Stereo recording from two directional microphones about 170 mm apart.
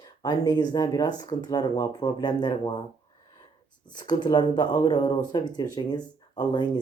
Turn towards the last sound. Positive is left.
turn(degrees=25)  # may be behind; listen again after turning